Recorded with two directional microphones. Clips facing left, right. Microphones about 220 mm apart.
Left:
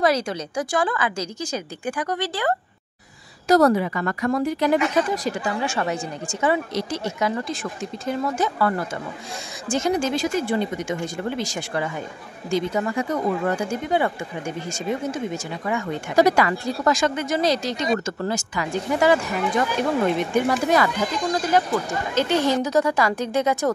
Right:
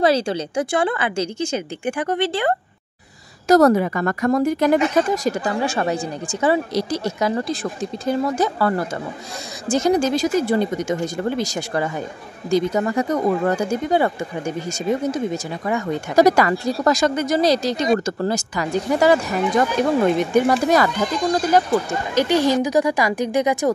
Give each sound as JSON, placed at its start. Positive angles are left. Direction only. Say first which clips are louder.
{"t": 0.0, "sound": "a woman's voice", "louder": "right 3 dB", "side_deg": -30}
{"t": 3.4, "sound": "speech", "louder": "right 3 dB", "side_deg": -45}
{"t": 22.1, "sound": "speech", "louder": "right 3 dB", "side_deg": -10}